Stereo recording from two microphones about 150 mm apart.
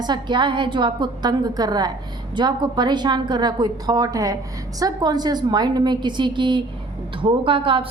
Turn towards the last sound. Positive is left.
turn(degrees=-35)  # may be behind; listen again after turning